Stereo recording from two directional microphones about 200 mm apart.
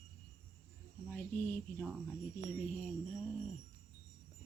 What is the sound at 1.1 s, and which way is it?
Speech, 10° left (ahead or behind).